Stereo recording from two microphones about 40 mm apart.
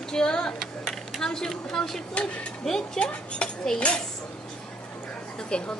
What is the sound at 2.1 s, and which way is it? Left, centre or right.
Speech, left.